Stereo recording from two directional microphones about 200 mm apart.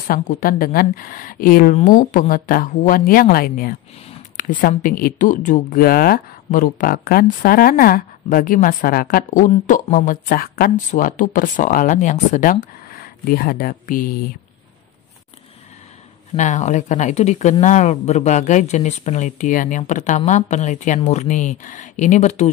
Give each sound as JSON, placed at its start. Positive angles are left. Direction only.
{"t": 0.1, "sound": "speech", "side_deg": 45}
{"t": 16.3, "sound": "speech", "side_deg": 35}